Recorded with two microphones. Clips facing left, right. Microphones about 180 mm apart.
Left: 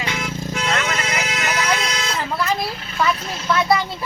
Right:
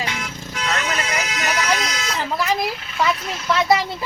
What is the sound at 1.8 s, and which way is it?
Vehicle, 30° left (ahead or behind).